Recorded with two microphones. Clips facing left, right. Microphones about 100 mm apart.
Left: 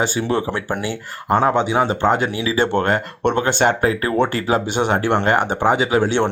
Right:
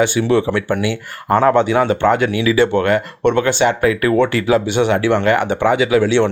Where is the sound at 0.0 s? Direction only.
35° left (ahead or behind).